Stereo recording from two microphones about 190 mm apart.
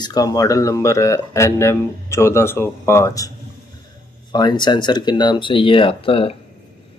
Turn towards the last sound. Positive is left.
turn(degrees=30)  # may be behind; listen again after turning